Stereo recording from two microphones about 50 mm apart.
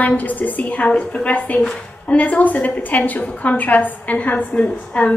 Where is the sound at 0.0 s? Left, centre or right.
Left.